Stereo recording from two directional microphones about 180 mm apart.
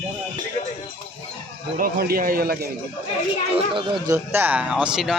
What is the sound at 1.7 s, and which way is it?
Speech, 55° right (ahead or behind).